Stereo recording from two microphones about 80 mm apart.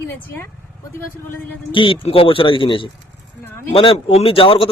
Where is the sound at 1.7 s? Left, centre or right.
Left.